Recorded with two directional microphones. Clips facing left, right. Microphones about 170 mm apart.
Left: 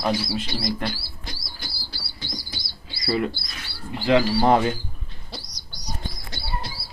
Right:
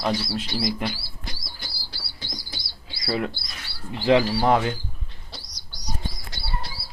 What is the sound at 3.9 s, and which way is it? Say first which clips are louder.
Speech: right 1 dB; 25° right (ahead or behind).